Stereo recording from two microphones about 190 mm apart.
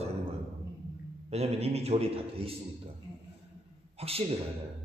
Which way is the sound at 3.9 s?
30° right (ahead or behind).